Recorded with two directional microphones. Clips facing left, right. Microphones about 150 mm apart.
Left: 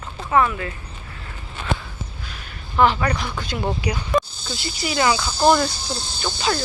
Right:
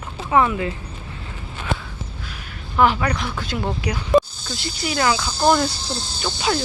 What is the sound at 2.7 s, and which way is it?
Speech, 5° right (ahead or behind).